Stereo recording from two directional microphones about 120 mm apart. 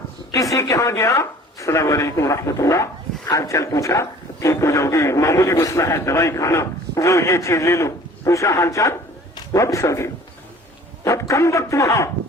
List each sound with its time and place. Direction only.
0.3 s a man's voice: 25° left (ahead or behind)